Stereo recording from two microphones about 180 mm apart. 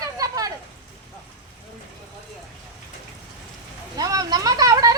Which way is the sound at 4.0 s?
20° right (ahead or behind).